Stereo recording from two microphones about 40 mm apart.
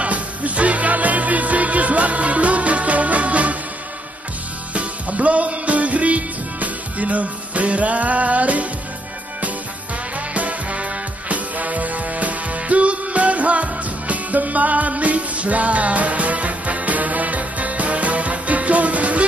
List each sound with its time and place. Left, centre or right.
0.0 s music: right
4.7 s music: right
10.1 s music: right